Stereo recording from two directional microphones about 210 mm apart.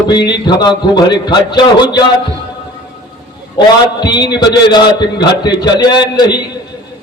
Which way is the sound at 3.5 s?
20° left (ahead or behind).